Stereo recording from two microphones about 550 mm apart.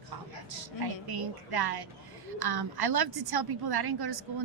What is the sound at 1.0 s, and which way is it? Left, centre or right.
A woman's voice, right.